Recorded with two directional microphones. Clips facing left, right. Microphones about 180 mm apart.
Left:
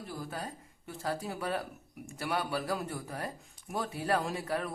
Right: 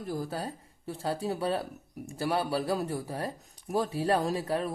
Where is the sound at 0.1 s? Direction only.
40° right (ahead or behind).